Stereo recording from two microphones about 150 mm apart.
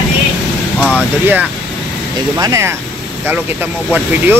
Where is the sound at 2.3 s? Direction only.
20° right (ahead or behind).